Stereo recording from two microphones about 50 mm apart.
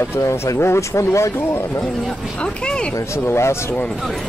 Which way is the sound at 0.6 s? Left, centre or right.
Left.